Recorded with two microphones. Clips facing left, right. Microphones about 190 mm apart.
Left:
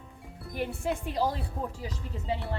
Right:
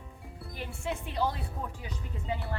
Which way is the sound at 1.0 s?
35° left (ahead or behind).